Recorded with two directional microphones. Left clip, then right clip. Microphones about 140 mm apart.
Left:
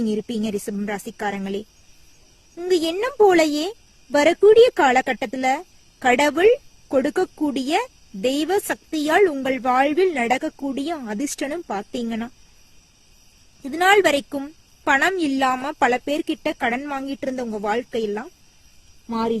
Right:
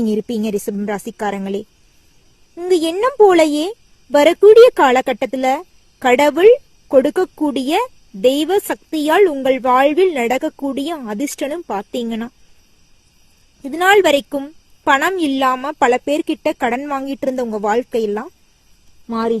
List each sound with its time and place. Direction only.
0.0 s a woman's voice: 35° right (ahead or behind)
2.6 s speech: 20° right (ahead or behind)
8.6 s a woman's voice: 5° right (ahead or behind)
9.0 s speech: 15° right (ahead or behind)
13.6 s a woman's voice: 10° right (ahead or behind)
15.1 s a woman's voice: centre (ahead or behind)
15.8 s a woman's voice: 25° right (ahead or behind)
19.0 s speech: centre (ahead or behind)